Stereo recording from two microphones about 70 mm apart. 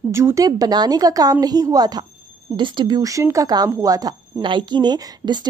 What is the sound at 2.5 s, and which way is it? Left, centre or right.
Speech, right.